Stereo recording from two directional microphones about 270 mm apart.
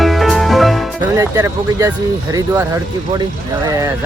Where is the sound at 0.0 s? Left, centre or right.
Centre.